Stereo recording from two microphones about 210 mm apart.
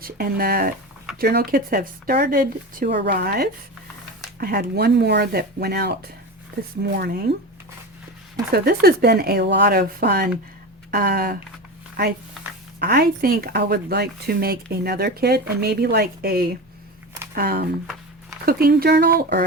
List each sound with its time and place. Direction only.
0.0 s speech: 45° right (ahead or behind)
8.5 s speech: 50° right (ahead or behind)
12.8 s speech: 50° right (ahead or behind)